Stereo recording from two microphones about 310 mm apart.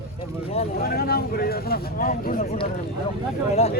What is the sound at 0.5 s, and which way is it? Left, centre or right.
Speech, left.